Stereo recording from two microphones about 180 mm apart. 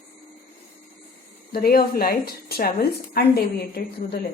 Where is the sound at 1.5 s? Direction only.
55° left (ahead or behind).